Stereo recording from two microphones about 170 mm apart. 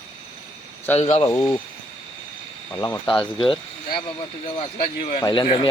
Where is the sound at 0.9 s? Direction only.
40° left (ahead or behind).